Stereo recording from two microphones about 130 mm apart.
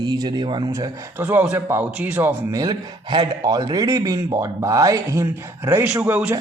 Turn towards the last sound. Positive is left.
turn(degrees=-10)  # may be behind; listen again after turning